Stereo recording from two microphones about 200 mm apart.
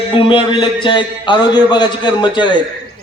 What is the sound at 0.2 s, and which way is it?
A man's voice, 25° left (ahead or behind).